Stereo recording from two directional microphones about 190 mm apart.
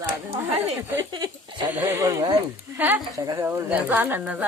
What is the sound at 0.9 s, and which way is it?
A woman's voice, 20° right (ahead or behind).